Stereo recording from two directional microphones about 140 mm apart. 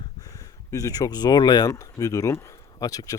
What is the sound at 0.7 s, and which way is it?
Speech, 25° left (ahead or behind).